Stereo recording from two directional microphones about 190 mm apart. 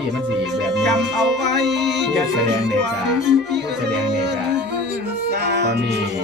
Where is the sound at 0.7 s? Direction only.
65° right (ahead or behind).